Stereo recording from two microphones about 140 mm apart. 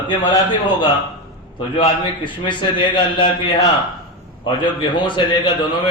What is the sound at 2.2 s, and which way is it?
A man's voice, 35° left (ahead or behind).